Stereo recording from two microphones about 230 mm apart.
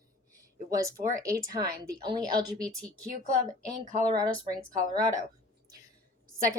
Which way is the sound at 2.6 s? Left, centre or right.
Centre.